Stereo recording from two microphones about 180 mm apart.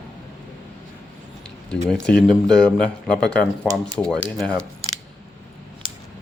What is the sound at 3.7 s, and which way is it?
Speech, 20° right (ahead or behind).